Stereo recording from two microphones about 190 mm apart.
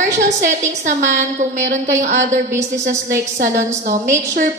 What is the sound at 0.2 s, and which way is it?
A woman's voice, 40° right (ahead or behind).